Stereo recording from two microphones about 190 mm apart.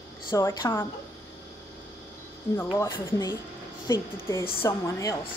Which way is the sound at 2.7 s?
20° left (ahead or behind).